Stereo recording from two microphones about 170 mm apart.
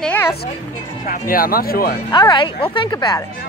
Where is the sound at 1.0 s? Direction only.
55° left (ahead or behind).